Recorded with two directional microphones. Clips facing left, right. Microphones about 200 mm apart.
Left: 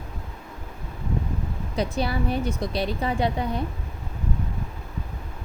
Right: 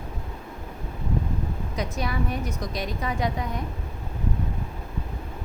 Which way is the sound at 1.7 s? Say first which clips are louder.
Left 5 dB; 30° left (ahead or behind).